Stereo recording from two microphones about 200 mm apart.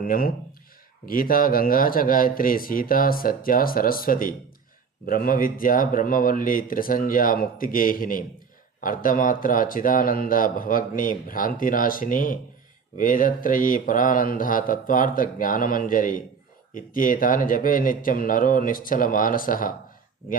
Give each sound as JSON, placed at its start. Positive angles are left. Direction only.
{"t": 0.0, "sound": "speech", "side_deg": 45}